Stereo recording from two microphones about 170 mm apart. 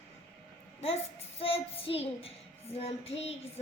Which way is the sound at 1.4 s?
35° left (ahead or behind).